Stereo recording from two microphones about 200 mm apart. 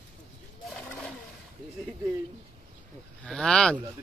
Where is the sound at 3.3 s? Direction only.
5° left (ahead or behind).